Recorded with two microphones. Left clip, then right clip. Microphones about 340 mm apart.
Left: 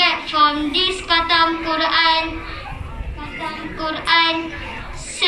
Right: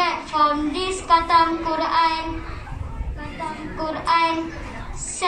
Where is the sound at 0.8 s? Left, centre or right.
Right.